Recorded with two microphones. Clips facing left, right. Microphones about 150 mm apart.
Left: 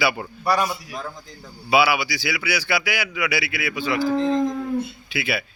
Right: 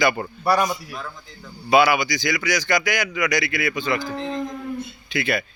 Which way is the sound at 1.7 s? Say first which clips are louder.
Right 2 dB; 5° left (ahead or behind).